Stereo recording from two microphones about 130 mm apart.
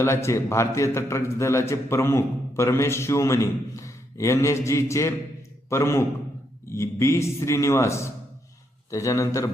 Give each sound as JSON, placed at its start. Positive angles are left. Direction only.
{"t": 0.0, "sound": "a man's voice", "side_deg": 20}